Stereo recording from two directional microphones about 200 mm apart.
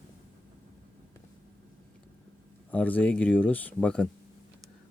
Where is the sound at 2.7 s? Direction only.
5° left (ahead or behind).